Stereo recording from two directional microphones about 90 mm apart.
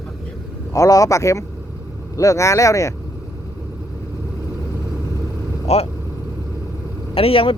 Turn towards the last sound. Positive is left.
turn(degrees=85)